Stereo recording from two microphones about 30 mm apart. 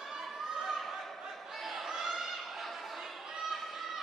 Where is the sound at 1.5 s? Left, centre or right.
Centre.